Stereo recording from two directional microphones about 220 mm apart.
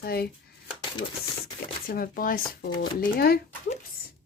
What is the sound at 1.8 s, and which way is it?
Speech, 40° left (ahead or behind).